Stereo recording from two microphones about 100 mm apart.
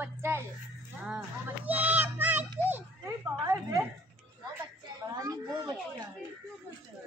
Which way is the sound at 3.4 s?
30° right (ahead or behind).